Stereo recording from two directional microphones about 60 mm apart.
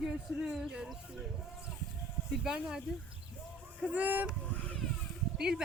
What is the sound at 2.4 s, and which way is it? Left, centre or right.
Speech, centre.